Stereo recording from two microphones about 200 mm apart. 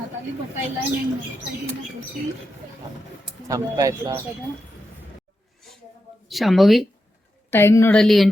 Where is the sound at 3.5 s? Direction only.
15° right (ahead or behind).